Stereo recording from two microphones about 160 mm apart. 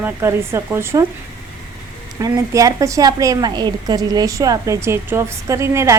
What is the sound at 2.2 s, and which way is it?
A woman's voice, 20° right (ahead or behind).